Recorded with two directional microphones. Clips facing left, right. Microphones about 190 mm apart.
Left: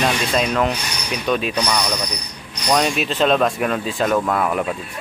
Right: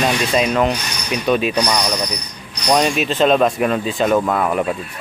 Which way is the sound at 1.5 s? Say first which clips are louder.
Right 3 dB; 15° right (ahead or behind).